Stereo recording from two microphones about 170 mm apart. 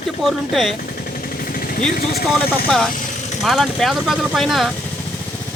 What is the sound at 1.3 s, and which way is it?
Vehicle, 55° left (ahead or behind).